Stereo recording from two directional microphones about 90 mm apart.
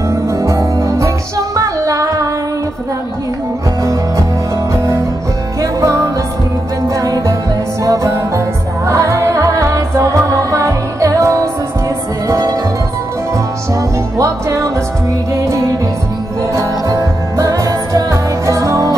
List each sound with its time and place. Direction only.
0.1 s music: 35° right (ahead or behind)
4.7 s music: 35° right (ahead or behind)
13.7 s music: 35° right (ahead or behind)